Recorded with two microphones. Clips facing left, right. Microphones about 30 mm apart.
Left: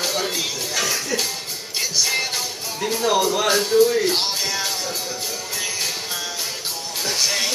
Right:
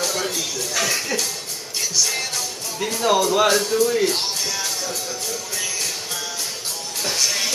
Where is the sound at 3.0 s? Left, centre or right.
Centre.